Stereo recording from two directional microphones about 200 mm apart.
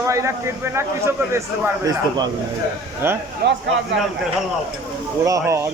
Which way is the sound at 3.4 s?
55° right (ahead or behind).